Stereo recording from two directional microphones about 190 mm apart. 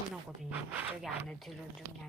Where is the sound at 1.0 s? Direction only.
Centre (ahead or behind).